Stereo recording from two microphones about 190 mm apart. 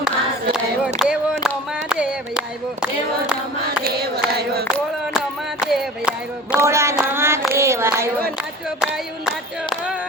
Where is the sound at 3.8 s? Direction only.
55° right (ahead or behind).